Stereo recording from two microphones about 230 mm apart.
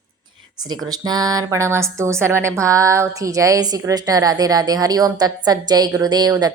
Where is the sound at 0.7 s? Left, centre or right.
Centre.